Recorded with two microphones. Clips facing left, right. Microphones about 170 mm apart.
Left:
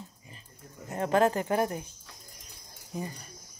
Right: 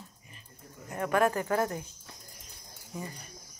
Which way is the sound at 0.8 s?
25° left (ahead or behind).